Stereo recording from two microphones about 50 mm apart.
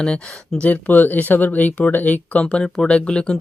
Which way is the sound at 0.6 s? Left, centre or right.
Left.